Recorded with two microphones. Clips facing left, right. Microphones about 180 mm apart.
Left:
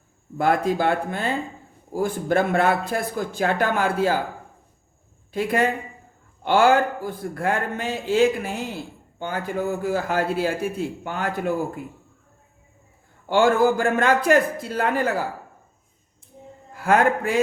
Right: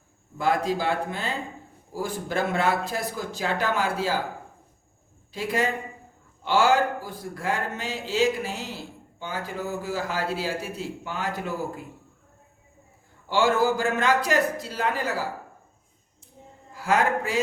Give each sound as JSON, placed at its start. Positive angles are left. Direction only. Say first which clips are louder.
{"t": 0.3, "sound": "a man's voice", "louder": "left 4 dB", "side_deg": 55}
{"t": 5.3, "sound": "a man's voice", "louder": "left 4 dB", "side_deg": 55}
{"t": 13.2, "sound": "a man's voice", "louder": "left 4 dB", "side_deg": 55}
{"t": 16.7, "sound": "a man's voice", "louder": "left 4 dB", "side_deg": 55}